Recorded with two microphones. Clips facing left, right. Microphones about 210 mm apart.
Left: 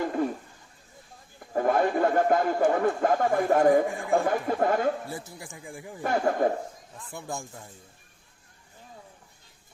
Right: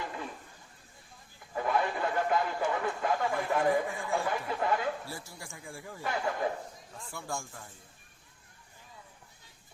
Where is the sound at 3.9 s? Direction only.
55° left (ahead or behind).